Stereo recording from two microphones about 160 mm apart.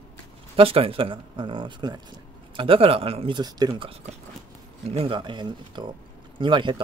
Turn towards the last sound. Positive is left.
turn(degrees=-30)  # may be behind; listen again after turning